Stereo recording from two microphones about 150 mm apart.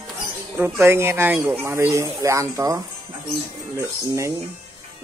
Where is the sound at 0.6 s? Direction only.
15° right (ahead or behind).